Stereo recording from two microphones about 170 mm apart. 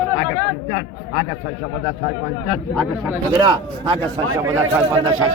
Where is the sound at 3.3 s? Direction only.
30° right (ahead or behind).